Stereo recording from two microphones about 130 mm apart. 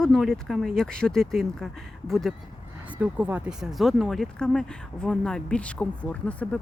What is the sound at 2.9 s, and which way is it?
Speech, 10° right (ahead or behind).